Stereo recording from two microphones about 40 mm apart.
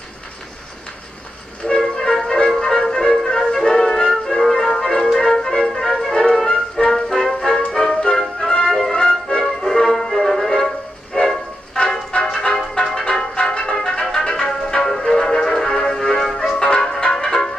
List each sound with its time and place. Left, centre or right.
1.7 s music: centre
6.4 s music: left
6.9 s music: centre
8.6 s music: centre
8.9 s music: centre
11.2 s train: centre
12.7 s music: centre
16.5 s music: centre